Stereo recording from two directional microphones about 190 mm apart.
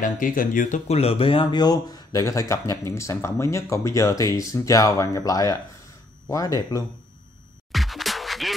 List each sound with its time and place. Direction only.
0.0 s speech: 45° left (ahead or behind); by 6.8 s 20° left (ahead or behind)
7.7 s music: centre (ahead or behind)